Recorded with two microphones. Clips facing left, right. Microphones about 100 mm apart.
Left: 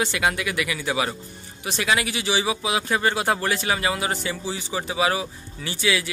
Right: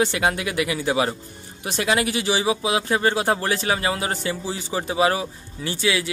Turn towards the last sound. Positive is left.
turn(degrees=-25)  # may be behind; listen again after turning